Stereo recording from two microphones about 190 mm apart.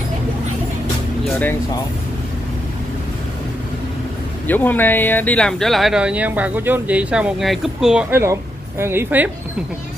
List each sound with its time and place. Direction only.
4.5 s speech: 10° left (ahead or behind); by 9.3 s 10° right (ahead or behind)